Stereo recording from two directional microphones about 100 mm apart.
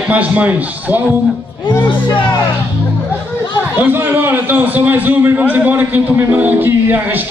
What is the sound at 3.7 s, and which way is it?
A man's voice, 20° right (ahead or behind).